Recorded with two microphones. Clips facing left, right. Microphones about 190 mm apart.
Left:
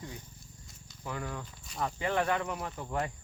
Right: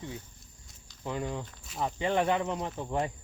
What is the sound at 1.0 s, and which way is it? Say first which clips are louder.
Speech: right 4 dB; 20° right (ahead or behind).